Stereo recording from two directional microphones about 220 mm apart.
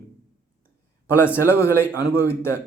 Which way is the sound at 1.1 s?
10° left (ahead or behind).